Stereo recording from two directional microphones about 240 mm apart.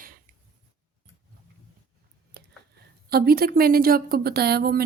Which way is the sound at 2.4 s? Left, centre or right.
Right.